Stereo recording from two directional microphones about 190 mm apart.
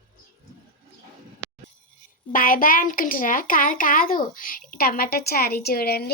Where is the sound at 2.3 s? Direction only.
45° left (ahead or behind).